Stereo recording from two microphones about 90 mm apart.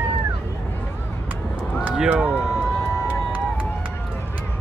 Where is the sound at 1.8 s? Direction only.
15° right (ahead or behind).